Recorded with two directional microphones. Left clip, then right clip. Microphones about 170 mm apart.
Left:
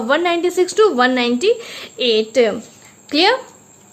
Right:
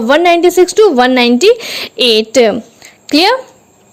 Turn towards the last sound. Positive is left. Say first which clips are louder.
# right 5 dB
turn(degrees=-45)  # may be behind; listen again after turning